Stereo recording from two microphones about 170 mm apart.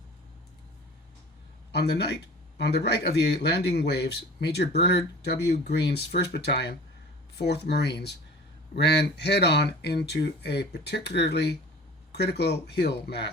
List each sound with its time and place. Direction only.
1.7 s speech: 75° left (ahead or behind)